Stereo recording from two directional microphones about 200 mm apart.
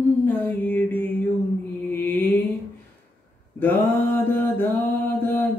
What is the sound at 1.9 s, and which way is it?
Mantra, 10° left (ahead or behind).